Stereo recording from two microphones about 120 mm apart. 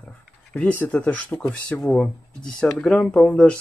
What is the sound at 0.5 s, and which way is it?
Speech, 10° left (ahead or behind).